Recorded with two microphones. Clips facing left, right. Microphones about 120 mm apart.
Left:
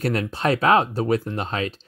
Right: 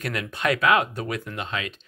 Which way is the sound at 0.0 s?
35° left (ahead or behind).